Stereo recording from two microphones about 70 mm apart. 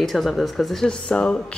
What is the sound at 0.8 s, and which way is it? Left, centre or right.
Speech, centre.